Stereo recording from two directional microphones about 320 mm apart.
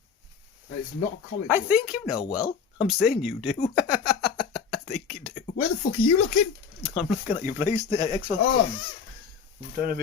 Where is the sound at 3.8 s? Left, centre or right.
Centre.